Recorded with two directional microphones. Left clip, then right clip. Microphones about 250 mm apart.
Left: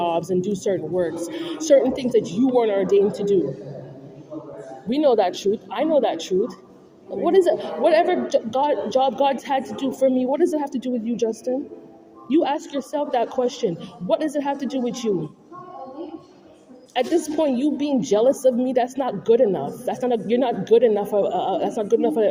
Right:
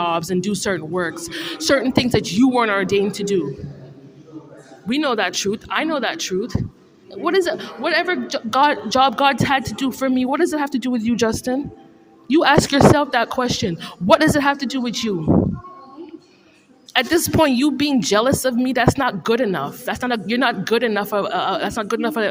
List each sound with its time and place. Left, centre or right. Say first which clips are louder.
0.0 s a man's voice: right 1 dB; right
4.9 s a man's voice: left 2 dB; right
16.9 s a man's voice: right 4 dB; right